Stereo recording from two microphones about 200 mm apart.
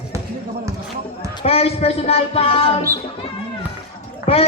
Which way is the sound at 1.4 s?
30° left (ahead or behind).